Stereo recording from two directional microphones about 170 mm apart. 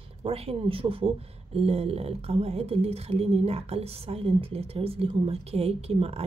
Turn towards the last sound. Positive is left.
turn(degrees=-35)  # may be behind; listen again after turning